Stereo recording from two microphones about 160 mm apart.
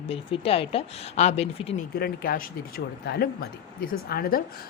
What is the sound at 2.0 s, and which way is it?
Speech, 65° left (ahead or behind).